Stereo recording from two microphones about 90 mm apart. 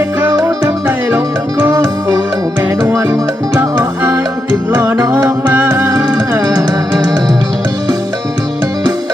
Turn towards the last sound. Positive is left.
turn(degrees=-45)  # may be behind; listen again after turning